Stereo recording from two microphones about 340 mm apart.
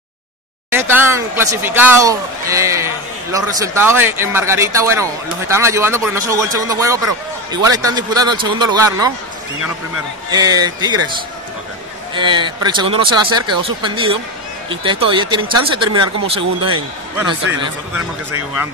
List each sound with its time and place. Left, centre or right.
0.7 s speech: centre
10.3 s speech: centre
12.1 s a man's voice: centre